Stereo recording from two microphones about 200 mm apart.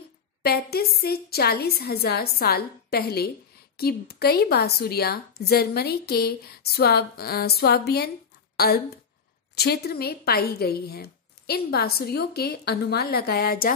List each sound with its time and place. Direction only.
0.4 s a woman's voice: 50° left (ahead or behind)